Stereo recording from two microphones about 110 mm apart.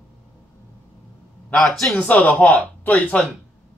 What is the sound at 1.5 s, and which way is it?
Speech, centre (ahead or behind).